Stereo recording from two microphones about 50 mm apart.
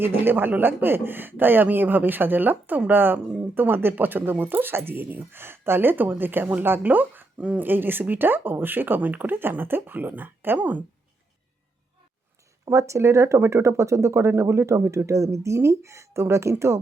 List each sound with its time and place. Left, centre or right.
0.0 s speech: right
7.7 s speech: right
12.7 s speech: right
13.0 s speech: right
14.8 s speech: right
16.2 s speech: right